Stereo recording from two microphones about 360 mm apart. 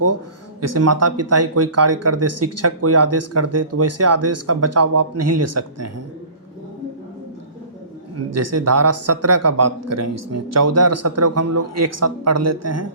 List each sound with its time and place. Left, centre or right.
0.6 s speech: right
8.3 s speech: right